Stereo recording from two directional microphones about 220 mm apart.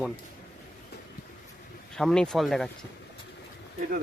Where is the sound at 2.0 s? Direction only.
Centre (ahead or behind).